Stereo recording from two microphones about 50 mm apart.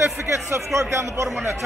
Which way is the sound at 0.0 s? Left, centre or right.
Right.